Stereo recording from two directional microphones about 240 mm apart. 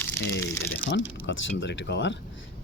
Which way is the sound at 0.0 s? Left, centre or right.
Centre.